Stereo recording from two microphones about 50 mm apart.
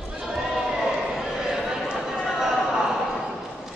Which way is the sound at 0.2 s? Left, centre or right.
Centre.